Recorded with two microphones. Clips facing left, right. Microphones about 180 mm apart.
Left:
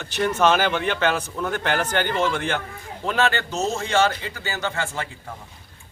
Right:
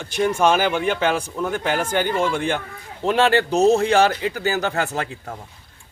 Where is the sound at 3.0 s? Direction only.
30° right (ahead or behind).